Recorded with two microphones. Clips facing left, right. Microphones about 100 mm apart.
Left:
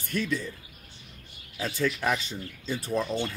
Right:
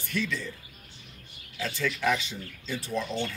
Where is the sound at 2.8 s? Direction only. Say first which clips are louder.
Left 3 dB; 45° left (ahead or behind).